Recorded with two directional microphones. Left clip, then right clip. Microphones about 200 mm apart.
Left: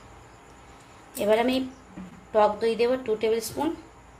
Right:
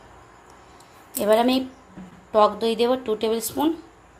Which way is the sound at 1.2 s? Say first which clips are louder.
Right 4 dB; 35° right (ahead or behind).